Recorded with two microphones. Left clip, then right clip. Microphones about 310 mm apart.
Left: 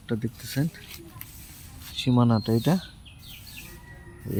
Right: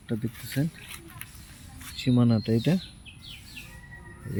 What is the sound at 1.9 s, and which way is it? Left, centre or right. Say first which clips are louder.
Speech: left 2 dB; centre.